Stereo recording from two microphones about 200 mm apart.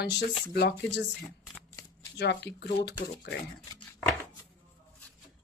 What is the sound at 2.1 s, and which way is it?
Speech, 55° left (ahead or behind).